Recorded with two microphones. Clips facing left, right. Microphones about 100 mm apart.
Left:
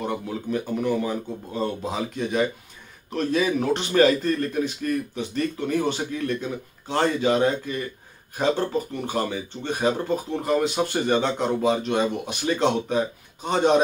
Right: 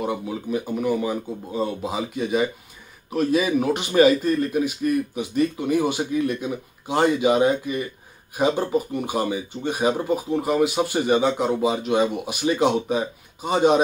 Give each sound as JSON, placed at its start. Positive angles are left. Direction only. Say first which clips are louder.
{"t": 0.0, "sound": "speech", "louder": "right 2 dB", "side_deg": -5}